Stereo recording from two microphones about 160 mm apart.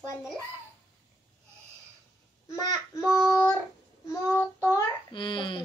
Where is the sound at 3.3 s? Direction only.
20° left (ahead or behind).